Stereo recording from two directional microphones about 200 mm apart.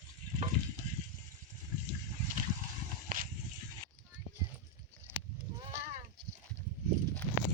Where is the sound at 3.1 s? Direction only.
45° right (ahead or behind).